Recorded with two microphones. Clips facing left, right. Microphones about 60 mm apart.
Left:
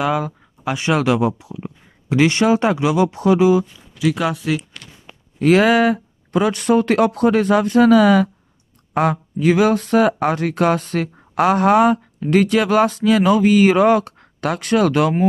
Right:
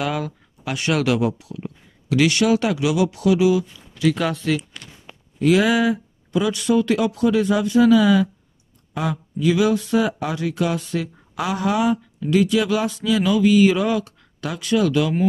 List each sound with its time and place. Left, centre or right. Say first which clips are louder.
0.0 s speech: left 5 dB; centre
4.0 s speech: left 1 dB; centre
5.4 s speech: left 4 dB; left